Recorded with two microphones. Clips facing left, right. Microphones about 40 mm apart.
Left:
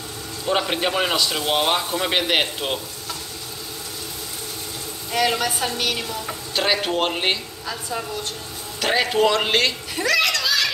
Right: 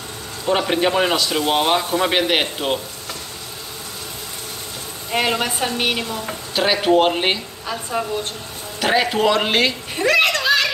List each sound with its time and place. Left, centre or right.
0.5 s a man's voice: centre
5.4 s a woman's voice: right
6.5 s speech: centre
7.6 s a woman's voice: right
8.8 s a man's voice: centre
9.9 s a child's voice: right